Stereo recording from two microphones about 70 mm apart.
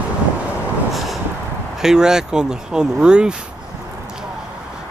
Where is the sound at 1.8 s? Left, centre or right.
Centre.